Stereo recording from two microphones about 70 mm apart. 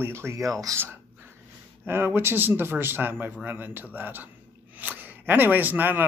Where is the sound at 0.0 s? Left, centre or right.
Right.